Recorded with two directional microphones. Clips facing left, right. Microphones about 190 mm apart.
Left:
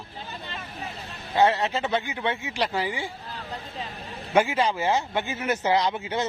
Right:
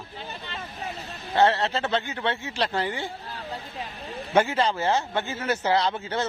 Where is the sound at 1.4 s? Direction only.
10° left (ahead or behind).